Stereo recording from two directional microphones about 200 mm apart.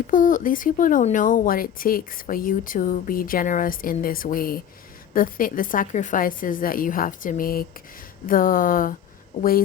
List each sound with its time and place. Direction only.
0.1 s speech: 40° left (ahead or behind)